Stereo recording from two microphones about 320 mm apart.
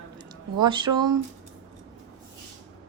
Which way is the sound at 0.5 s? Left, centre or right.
Centre.